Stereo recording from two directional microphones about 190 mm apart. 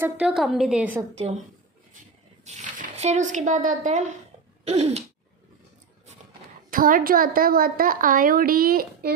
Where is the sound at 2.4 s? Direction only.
40° right (ahead or behind).